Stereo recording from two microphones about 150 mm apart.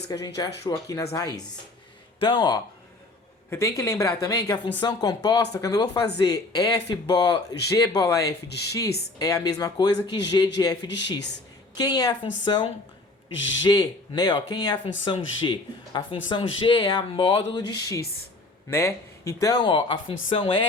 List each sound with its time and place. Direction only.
0.1 s speech: 25° left (ahead or behind)
3.5 s speech: 20° left (ahead or behind)